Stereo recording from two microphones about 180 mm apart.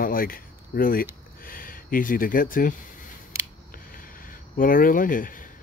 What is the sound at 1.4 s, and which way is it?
Speech, 50° left (ahead or behind).